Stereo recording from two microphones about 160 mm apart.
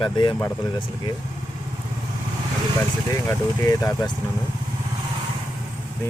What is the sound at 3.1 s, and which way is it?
Speech, 20° left (ahead or behind).